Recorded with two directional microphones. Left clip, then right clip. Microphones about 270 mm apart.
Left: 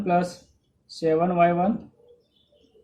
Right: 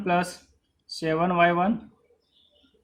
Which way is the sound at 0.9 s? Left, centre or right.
Right.